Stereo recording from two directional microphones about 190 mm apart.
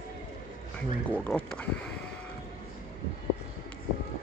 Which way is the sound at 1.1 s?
5° left (ahead or behind).